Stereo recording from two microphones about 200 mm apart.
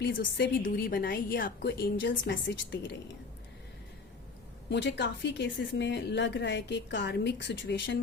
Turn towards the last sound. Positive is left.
turn(degrees=60)  # may be behind; listen again after turning